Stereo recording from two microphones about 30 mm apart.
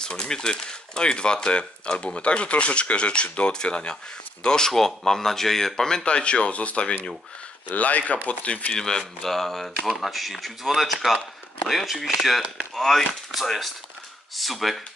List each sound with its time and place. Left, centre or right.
0.0 s speech: left
4.7 s speech: centre
6.0 s speech: left
7.6 s speech: left
8.7 s speech: left
9.2 s speech: centre
9.8 s speech: centre
12.7 s speech: centre
13.3 s speech: centre